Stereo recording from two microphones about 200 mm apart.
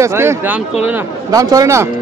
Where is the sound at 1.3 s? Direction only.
15° right (ahead or behind).